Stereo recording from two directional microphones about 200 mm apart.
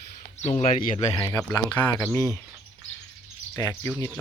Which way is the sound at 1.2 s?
15° left (ahead or behind).